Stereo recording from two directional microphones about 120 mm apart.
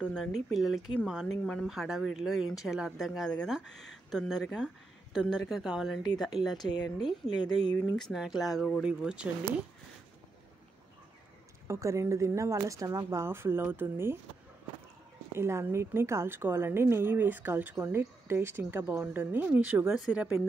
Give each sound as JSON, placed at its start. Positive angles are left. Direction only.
{"t": 0.0, "sound": "speech", "side_deg": 5}
{"t": 3.1, "sound": "speech", "side_deg": 5}
{"t": 7.1, "sound": "a woman's voice", "side_deg": 35}
{"t": 7.9, "sound": "speech", "side_deg": 0}
{"t": 8.8, "sound": "speech", "side_deg": -10}
{"t": 11.6, "sound": "a woman's voice", "side_deg": -25}
{"t": 15.3, "sound": "a woman's voice", "side_deg": -20}